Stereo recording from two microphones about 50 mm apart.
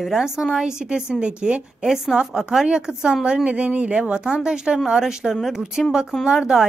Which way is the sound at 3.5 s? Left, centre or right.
Right.